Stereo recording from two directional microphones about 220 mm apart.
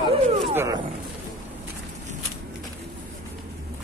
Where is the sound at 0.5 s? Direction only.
15° right (ahead or behind).